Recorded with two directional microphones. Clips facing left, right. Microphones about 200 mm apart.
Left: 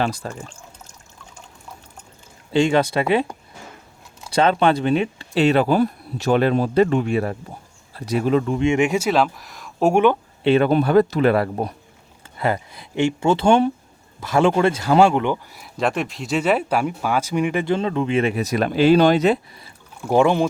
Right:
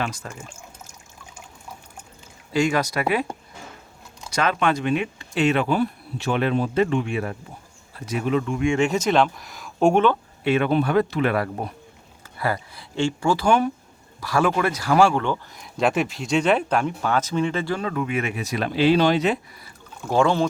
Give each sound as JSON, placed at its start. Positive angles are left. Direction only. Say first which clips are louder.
{"t": 0.0, "sound": "speech", "louder": "left 5 dB", "side_deg": 35}
{"t": 0.3, "sound": "pour", "louder": "left 3 dB", "side_deg": -5}
{"t": 2.5, "sound": "speech", "louder": "left 4 dB", "side_deg": 25}
{"t": 4.4, "sound": "speech", "louder": "left 5 dB", "side_deg": 30}
{"t": 8.6, "sound": "speech", "louder": "left 2 dB", "side_deg": 15}
{"t": 9.9, "sound": "speech", "louder": "left 4 dB", "side_deg": 15}
{"t": 10.4, "sound": "speech", "louder": "left 4 dB", "side_deg": 35}
{"t": 12.4, "sound": "speech", "louder": "left 4 dB", "side_deg": 20}
{"t": 15.5, "sound": "speech", "louder": "right 1 dB", "side_deg": 0}
{"t": 20.0, "sound": "speech", "louder": "left 3 dB", "side_deg": 15}